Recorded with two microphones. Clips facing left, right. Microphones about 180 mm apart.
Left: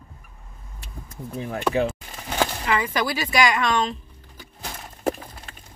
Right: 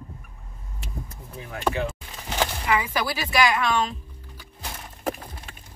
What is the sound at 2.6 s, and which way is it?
Speech, 5° right (ahead or behind).